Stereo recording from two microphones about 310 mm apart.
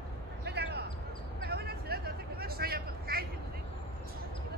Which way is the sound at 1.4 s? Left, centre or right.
Right.